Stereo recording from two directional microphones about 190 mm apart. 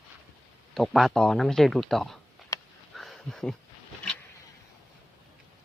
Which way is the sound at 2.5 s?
15° left (ahead or behind).